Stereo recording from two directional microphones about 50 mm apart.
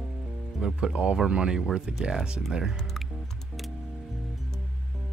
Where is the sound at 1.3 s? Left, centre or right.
Centre.